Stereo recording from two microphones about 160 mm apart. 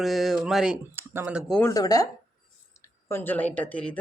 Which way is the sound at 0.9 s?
15° right (ahead or behind).